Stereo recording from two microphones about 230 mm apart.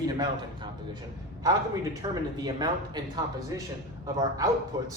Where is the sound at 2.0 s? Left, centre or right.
Centre.